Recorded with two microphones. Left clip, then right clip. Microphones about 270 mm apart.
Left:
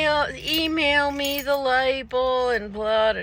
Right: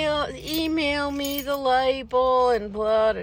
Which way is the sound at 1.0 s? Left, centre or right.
Centre.